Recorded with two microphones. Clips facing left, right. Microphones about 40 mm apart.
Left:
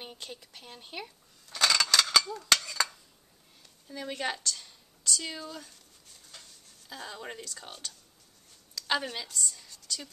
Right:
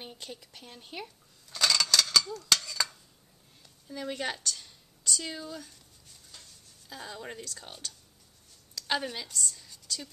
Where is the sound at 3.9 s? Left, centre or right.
Centre.